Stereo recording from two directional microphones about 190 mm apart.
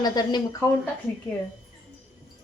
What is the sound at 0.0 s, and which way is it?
Speech, 20° left (ahead or behind).